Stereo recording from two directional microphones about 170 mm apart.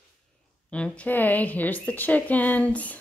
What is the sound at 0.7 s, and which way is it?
A woman's voice, 5° left (ahead or behind).